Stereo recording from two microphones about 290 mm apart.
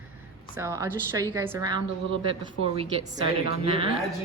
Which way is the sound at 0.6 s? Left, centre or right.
Centre.